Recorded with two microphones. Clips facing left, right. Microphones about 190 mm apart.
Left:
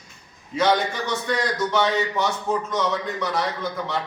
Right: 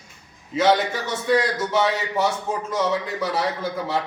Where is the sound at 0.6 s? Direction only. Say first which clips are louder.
Right 2 dB; 5° right (ahead or behind).